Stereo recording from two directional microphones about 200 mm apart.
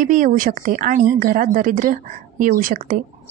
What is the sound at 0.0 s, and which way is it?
A woman's voice, 40° right (ahead or behind).